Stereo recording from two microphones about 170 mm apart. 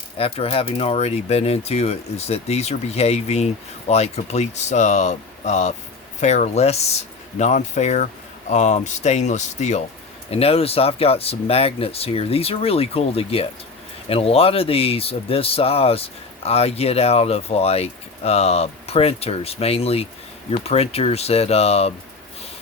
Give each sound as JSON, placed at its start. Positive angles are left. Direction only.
{"t": 0.2, "sound": "speech", "side_deg": 35}